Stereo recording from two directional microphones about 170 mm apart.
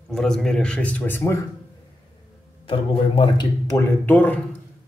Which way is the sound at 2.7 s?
25° left (ahead or behind).